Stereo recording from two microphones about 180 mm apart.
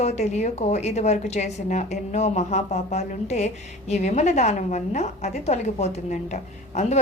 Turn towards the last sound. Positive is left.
turn(degrees=40)  # may be behind; listen again after turning